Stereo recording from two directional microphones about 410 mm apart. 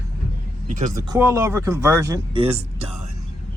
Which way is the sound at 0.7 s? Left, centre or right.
Centre.